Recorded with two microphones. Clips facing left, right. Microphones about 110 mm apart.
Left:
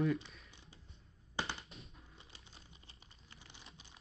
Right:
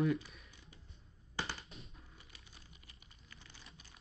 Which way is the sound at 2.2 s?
25° left (ahead or behind).